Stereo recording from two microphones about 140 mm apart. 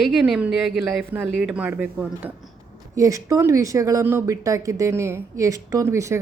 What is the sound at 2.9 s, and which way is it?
Speech, 25° right (ahead or behind).